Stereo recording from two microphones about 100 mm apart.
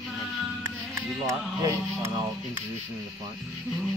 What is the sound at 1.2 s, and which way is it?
Speech, 35° right (ahead or behind).